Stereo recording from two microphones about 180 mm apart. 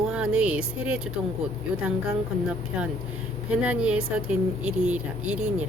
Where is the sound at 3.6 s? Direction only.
5° right (ahead or behind).